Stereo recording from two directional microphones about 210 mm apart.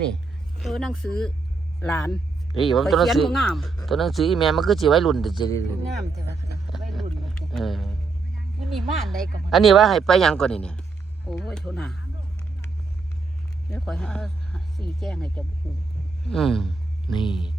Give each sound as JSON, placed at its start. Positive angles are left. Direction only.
{"t": 0.6, "sound": "speech", "side_deg": 0}
{"t": 5.4, "sound": "speech", "side_deg": 15}
{"t": 6.7, "sound": "a sound", "side_deg": 0}
{"t": 8.7, "sound": "speech", "side_deg": 0}
{"t": 13.7, "sound": "speech", "side_deg": 0}
{"t": 17.1, "sound": "mantra", "side_deg": 20}